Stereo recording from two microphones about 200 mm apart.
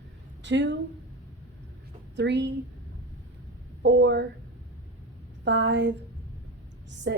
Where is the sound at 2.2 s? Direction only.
60° right (ahead or behind).